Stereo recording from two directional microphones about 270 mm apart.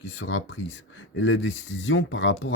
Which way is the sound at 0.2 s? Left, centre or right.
Left.